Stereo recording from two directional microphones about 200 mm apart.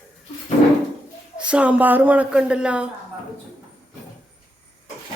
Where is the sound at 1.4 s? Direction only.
5° right (ahead or behind).